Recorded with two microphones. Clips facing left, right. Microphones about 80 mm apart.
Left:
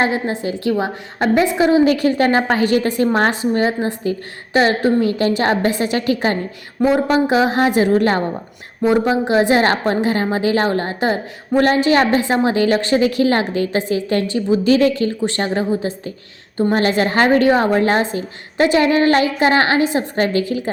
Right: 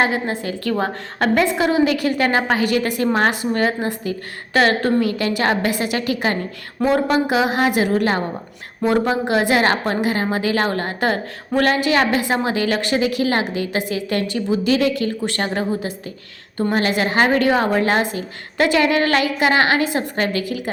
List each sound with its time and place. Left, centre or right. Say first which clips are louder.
0.0 s a woman's voice: left 1 dB; left
0.7 s a woman's voice: left 1 dB; centre
1.8 s a woman's voice: left 3 dB; left
4.5 s a woman's voice: left 2 dB; left
6.8 s a woman's voice: left 2 dB; centre
7.3 s a woman's voice: left 3 dB; left
8.8 s a woman's voice: left 3 dB; centre